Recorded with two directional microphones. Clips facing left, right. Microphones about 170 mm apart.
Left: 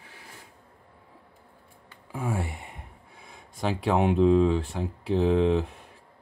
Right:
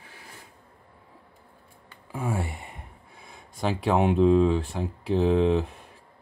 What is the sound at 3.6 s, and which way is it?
Speech, 45° right (ahead or behind).